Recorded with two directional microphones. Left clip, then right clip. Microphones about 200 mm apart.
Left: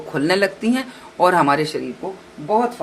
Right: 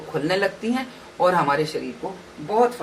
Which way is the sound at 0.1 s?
45° left (ahead or behind).